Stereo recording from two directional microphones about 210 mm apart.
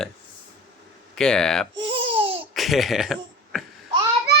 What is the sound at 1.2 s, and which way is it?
Speech, 5° left (ahead or behind).